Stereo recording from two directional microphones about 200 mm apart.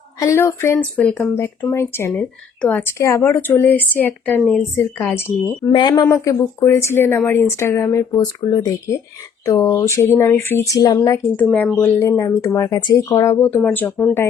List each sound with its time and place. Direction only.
0.2 s speech: 15° left (ahead or behind)
11.4 s speech: 5° left (ahead or behind)